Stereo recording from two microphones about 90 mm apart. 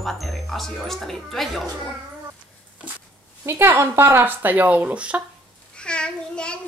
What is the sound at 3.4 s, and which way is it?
Speech, 25° right (ahead or behind).